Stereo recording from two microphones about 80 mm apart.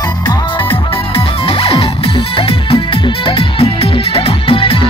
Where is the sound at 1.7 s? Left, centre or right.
Left.